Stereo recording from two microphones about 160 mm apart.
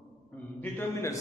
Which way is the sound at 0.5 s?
15° left (ahead or behind).